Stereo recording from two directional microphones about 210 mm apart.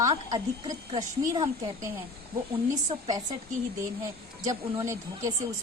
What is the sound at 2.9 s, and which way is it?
Speech, 25° right (ahead or behind).